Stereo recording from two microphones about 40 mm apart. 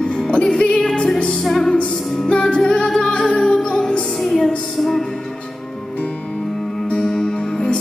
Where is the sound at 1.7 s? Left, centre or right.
Left.